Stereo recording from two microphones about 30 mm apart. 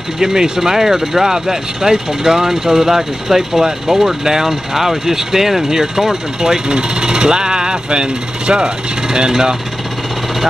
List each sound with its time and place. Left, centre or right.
0.2 s speech: right